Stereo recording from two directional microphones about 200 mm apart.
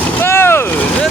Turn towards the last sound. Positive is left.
turn(degrees=10)  # may be behind; listen again after turning